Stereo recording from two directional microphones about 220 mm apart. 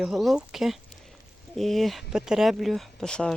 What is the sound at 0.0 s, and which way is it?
Speech, centre (ahead or behind).